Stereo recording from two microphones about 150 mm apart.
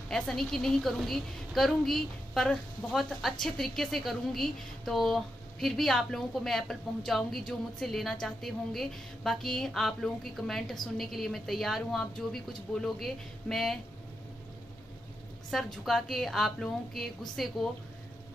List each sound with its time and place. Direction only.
0.1 s a woman's voice: 5° left (ahead or behind)
15.5 s a woman's voice: centre (ahead or behind)